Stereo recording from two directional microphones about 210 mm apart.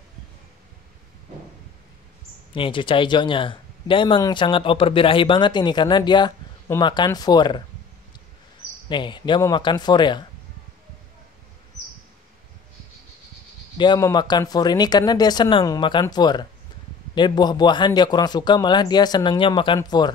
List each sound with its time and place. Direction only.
2.5 s speech: 25° left (ahead or behind)
8.8 s speech: 20° left (ahead or behind)
13.7 s speech: 20° left (ahead or behind)